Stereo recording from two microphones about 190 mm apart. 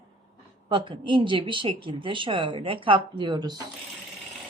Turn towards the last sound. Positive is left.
turn(degrees=-20)  # may be behind; listen again after turning